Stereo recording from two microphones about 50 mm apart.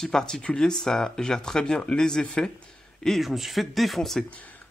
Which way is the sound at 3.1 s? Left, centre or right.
Centre.